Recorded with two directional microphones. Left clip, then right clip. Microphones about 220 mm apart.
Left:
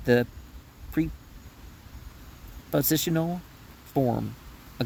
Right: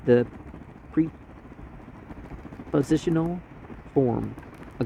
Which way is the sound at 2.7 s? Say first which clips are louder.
Right 2 dB; 90° left.